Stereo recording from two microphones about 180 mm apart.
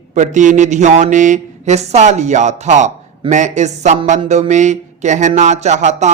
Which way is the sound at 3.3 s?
40° right (ahead or behind).